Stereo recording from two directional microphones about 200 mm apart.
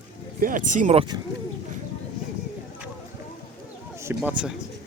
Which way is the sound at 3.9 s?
15° right (ahead or behind).